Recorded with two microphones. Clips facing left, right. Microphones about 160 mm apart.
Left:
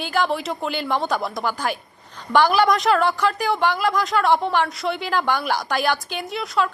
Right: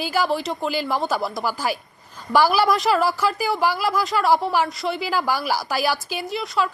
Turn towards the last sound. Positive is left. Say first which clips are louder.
# left 1 dB
turn(degrees=0)  # may be behind; listen again after turning